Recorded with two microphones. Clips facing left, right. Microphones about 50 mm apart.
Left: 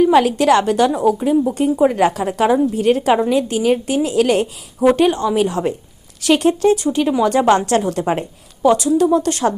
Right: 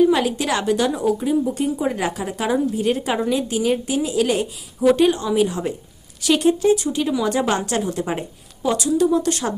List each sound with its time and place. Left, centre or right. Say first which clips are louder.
0.2 s a woman's voice: left 8 dB; left
8.7 s a woman's voice: left 2 dB; left